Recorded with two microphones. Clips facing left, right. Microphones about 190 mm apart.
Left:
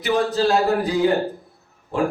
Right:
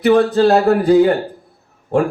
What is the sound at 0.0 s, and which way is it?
Speech, 55° right (ahead or behind).